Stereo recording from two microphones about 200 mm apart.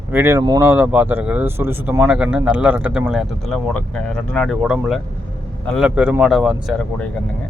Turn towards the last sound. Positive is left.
turn(degrees=0)  # may be behind; listen again after turning